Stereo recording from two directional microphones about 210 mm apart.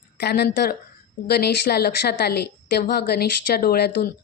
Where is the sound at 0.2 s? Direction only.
50° left (ahead or behind).